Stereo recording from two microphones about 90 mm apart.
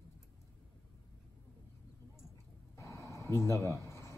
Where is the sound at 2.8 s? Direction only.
35° left (ahead or behind).